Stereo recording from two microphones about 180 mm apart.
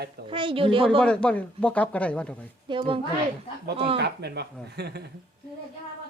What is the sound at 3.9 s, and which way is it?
A man's voice, 65° right (ahead or behind).